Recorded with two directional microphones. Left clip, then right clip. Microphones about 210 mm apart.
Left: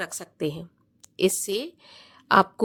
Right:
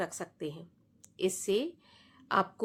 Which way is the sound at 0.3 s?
45° left (ahead or behind).